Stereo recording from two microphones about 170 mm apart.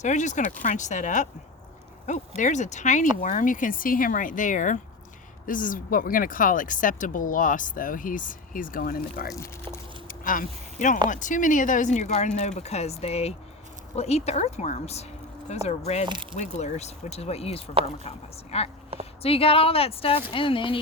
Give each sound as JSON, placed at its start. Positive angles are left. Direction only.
{"t": 0.0, "sound": "speech", "side_deg": 45}
{"t": 10.1, "sound": "a sound", "side_deg": 55}
{"t": 11.1, "sound": "speech", "side_deg": 50}
{"t": 16.0, "sound": "speech", "side_deg": -25}
{"t": 16.4, "sound": "speech", "side_deg": 45}